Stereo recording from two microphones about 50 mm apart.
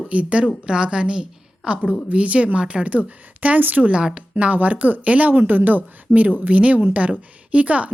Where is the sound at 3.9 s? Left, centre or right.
Right.